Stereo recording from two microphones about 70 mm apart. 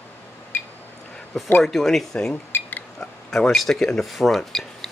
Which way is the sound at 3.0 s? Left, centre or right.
Centre.